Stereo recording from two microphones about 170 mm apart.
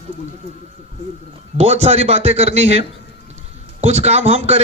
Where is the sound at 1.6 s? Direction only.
35° right (ahead or behind).